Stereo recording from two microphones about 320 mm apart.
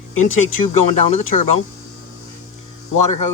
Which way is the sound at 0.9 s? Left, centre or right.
Left.